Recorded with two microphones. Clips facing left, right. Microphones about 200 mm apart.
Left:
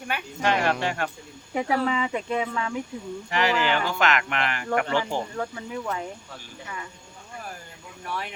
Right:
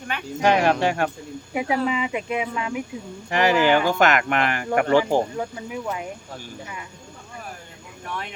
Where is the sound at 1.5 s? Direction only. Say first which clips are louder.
Right 1 dB; 10° right (ahead or behind).